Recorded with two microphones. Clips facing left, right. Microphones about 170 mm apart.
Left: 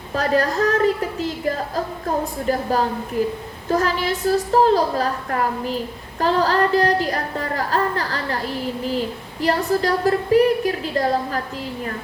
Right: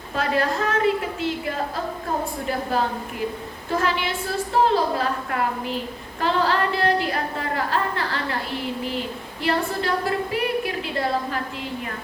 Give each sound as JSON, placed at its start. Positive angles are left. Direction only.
{"t": 0.2, "sound": "a woman's voice", "side_deg": 40}
{"t": 9.4, "sound": "a woman's voice", "side_deg": 40}